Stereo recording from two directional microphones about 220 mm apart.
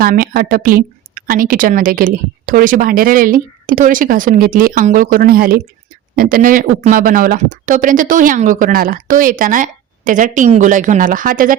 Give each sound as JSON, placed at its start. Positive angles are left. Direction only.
{"t": 0.0, "sound": "a woman's voice", "side_deg": -40}